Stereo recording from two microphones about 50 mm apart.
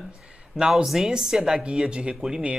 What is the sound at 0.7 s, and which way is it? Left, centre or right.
Speech, centre.